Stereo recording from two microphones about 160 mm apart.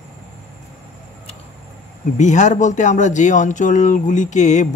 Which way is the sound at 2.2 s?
50° left (ahead or behind).